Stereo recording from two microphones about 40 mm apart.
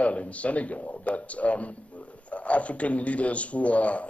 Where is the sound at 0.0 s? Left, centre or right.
Left.